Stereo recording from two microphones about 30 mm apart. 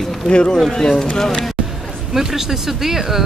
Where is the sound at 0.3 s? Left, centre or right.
Left.